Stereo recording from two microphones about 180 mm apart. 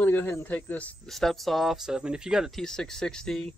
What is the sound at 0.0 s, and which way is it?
Speech, 10° left (ahead or behind).